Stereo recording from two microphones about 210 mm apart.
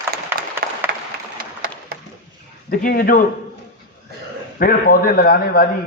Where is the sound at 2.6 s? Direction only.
45° left (ahead or behind).